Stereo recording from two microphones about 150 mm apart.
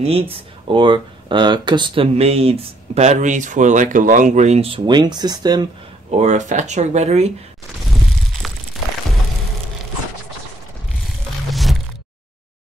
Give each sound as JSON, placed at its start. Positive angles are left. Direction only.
{"t": 0.0, "sound": "speech", "side_deg": -40}
{"t": 6.1, "sound": "speech", "side_deg": -50}
{"t": 11.5, "sound": "a sound", "side_deg": 0}